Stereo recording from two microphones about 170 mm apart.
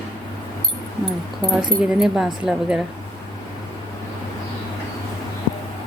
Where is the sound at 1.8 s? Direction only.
5° right (ahead or behind).